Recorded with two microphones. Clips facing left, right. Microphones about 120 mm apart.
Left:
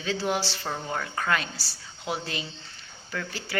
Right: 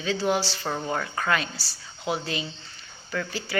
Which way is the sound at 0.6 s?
10° right (ahead or behind).